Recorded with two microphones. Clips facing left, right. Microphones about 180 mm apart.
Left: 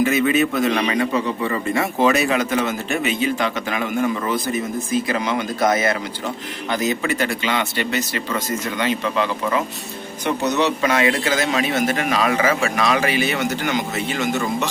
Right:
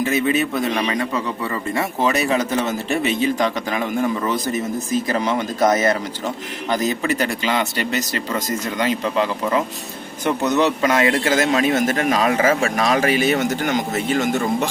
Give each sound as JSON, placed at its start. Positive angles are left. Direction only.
{"t": 0.1, "sound": "speech", "side_deg": -35}
{"t": 2.1, "sound": "a man's voice", "side_deg": -35}